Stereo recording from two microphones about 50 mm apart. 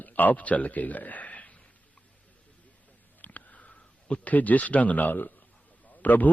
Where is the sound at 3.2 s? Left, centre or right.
Left.